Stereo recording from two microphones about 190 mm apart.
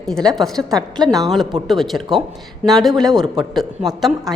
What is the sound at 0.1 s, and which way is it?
A woman's voice, centre (ahead or behind).